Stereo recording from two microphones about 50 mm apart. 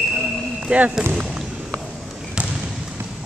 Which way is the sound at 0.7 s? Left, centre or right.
Right.